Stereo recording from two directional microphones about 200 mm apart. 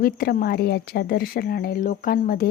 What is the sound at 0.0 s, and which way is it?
A woman's voice, 45° left (ahead or behind).